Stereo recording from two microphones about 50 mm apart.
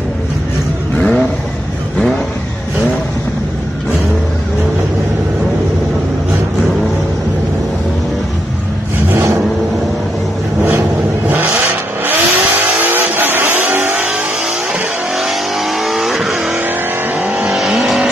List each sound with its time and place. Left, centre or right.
0.9 s vehicle: left
11.2 s vehicle: right
15.1 s vehicle: centre